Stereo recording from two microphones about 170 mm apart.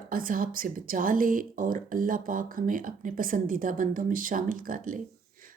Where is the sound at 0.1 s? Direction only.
55° right (ahead or behind).